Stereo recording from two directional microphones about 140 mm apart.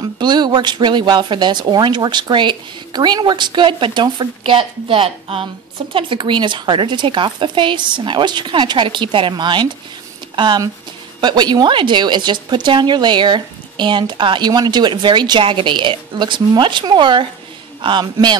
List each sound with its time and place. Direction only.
0.2 s a woman's voice: 30° right (ahead or behind)